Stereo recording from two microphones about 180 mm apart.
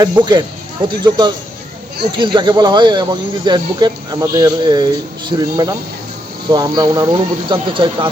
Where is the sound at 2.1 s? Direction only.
25° right (ahead or behind).